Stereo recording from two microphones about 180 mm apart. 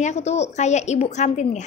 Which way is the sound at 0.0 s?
40° left (ahead or behind).